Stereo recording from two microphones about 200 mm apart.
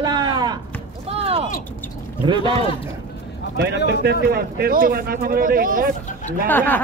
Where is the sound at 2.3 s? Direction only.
25° right (ahead or behind).